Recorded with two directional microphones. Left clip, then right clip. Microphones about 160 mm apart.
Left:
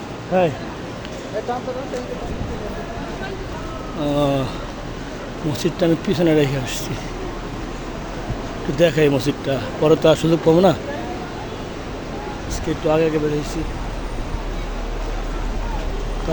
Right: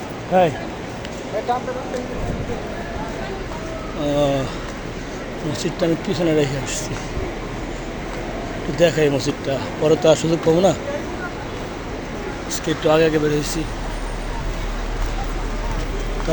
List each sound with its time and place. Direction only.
0.3 s speech: 30° left (ahead or behind)
4.0 s speech: 30° left (ahead or behind)
5.8 s speech: 45° left (ahead or behind)
8.8 s speech: 45° left (ahead or behind)
12.6 s speech: 5° left (ahead or behind)